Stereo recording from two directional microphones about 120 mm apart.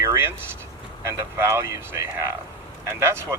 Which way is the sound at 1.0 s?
25° right (ahead or behind).